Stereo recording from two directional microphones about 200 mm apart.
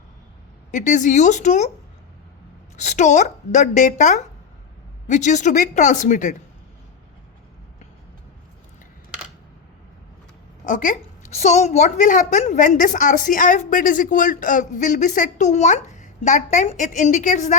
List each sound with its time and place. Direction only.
0.7 s a woman's voice: 40° left (ahead or behind)
2.7 s a woman's voice: 35° left (ahead or behind)
10.7 s a woman's voice: 40° left (ahead or behind)